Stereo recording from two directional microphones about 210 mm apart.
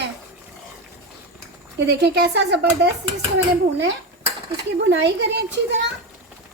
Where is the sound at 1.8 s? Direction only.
50° right (ahead or behind).